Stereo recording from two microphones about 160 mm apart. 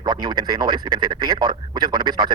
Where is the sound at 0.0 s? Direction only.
25° right (ahead or behind).